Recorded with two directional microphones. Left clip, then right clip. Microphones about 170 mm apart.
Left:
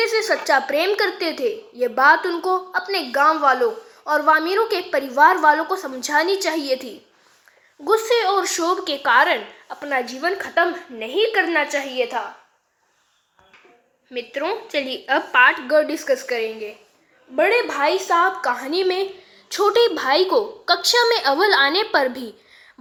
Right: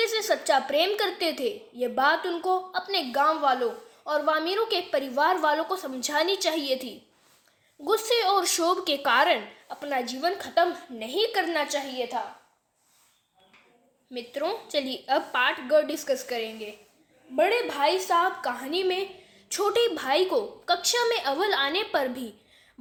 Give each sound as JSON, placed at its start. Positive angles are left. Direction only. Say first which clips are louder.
{"t": 0.0, "sound": "a child's voice", "louder": "left 6 dB", "side_deg": -10}
{"t": 7.9, "sound": "a child's voice", "louder": "left 6 dB", "side_deg": -15}
{"t": 14.1, "sound": "a child's voice", "louder": "left 6 dB", "side_deg": -15}
{"t": 15.4, "sound": "a woman's voice", "louder": "left 6 dB", "side_deg": -5}